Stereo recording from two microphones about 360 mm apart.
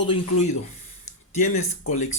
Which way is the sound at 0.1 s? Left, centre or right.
Centre.